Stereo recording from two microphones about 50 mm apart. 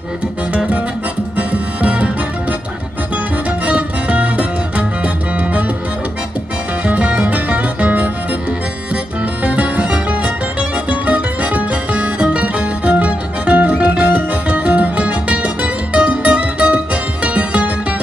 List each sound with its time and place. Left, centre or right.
1.5 s music: right
3.6 s music: right
6.8 s music: right
9.4 s music: right